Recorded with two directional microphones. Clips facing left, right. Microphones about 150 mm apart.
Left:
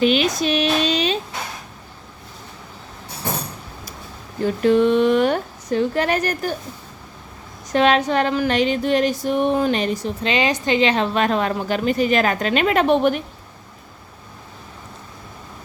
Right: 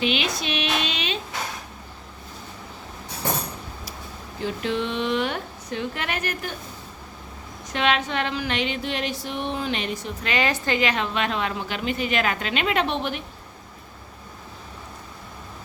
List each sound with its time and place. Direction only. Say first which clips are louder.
0.0 s a woman's voice: left 8 dB; 45° left (ahead or behind)
4.4 s speech: left 10 dB; 45° left (ahead or behind)
7.7 s a woman's voice: left 7 dB; 40° left (ahead or behind)
10.2 s a woman's voice: left 4 dB; 20° left (ahead or behind); by 13.2 s 45° left (ahead or behind)